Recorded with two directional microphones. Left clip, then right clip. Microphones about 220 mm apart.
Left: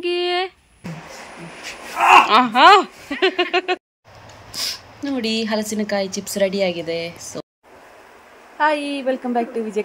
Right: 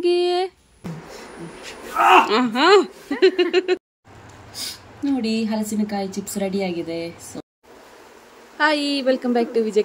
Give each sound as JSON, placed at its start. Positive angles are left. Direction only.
{"t": 0.0, "sound": "a sound", "side_deg": 5}
{"t": 2.2, "sound": "speech", "side_deg": -10}
{"t": 8.5, "sound": "speech", "side_deg": 0}